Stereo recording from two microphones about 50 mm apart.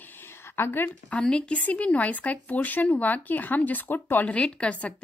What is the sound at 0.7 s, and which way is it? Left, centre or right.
Speech, left.